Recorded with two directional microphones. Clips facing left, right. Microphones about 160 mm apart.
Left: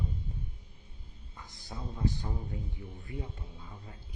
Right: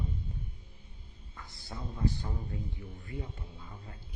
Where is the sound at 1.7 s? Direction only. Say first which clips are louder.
Even; 15° left (ahead or behind).